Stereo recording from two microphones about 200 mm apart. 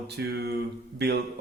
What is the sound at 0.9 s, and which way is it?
Speech, 55° right (ahead or behind).